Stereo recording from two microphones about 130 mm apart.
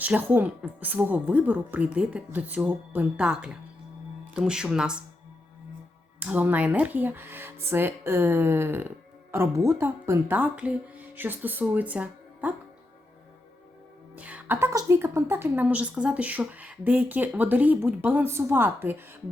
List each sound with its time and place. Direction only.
0.0 s a woman's voice: 10° right (ahead or behind)
6.1 s a woman's voice: 10° right (ahead or behind)
14.2 s a woman's voice: 10° right (ahead or behind)